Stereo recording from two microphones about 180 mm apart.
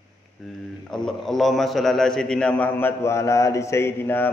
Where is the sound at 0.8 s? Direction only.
5° left (ahead or behind).